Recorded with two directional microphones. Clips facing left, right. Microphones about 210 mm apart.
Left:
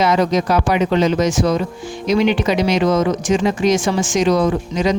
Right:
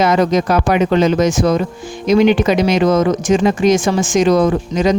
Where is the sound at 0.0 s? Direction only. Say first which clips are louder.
Right 2 dB; 50° right (ahead or behind).